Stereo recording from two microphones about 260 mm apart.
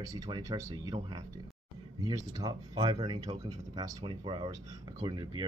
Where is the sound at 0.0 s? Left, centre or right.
Centre.